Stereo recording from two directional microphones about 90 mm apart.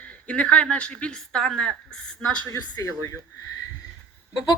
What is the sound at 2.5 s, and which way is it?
Speech, 35° left (ahead or behind).